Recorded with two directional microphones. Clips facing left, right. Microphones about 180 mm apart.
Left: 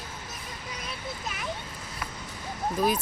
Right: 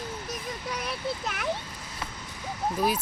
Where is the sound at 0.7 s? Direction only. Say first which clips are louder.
Right 6 dB; 65° right (ahead or behind).